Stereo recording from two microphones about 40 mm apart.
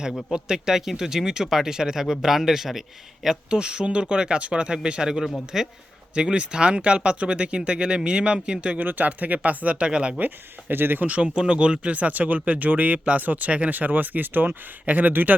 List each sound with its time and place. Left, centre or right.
0.3 s speech: centre
3.2 s speech: right
6.1 s speech: right
8.8 s speech: right
10.2 s speech: right
11.0 s speech: right
11.3 s speech: right
15.1 s speech: right